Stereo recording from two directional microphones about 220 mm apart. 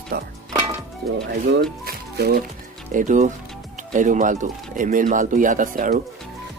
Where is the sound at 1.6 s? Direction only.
45° right (ahead or behind).